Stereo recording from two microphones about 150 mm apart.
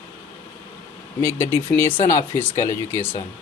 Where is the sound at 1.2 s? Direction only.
15° left (ahead or behind).